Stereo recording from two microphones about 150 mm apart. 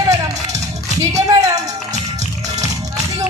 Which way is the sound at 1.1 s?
20° right (ahead or behind).